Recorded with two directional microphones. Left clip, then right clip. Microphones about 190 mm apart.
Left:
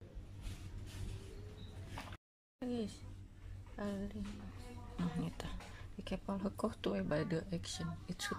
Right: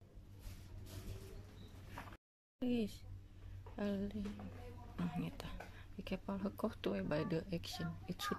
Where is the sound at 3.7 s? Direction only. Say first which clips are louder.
Right 1 dB; 10° right (ahead or behind).